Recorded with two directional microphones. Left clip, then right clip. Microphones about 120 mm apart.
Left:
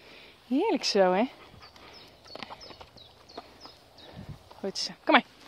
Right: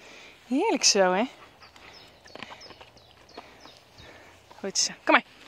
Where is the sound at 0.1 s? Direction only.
5° left (ahead or behind).